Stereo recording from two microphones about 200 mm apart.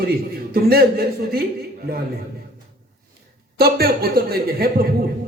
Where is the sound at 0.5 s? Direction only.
50° right (ahead or behind).